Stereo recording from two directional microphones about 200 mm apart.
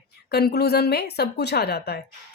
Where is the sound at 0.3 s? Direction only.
55° left (ahead or behind).